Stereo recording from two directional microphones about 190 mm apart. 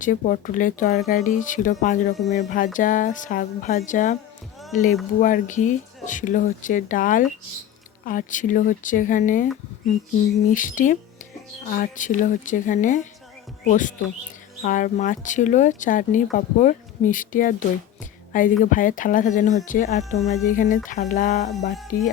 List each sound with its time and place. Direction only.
0.0 s speech: 45° left (ahead or behind)
10.5 s speech: 45° left (ahead or behind)
18.0 s music: 45° left (ahead or behind)
18.6 s speech: 45° left (ahead or behind)
21.9 s speech: 50° left (ahead or behind)